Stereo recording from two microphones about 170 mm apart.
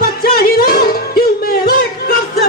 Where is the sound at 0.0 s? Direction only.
65° left (ahead or behind).